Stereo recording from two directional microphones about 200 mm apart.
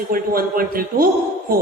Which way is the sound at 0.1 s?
45° right (ahead or behind).